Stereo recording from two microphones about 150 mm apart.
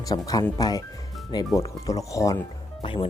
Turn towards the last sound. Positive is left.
turn(degrees=35)  # may be behind; listen again after turning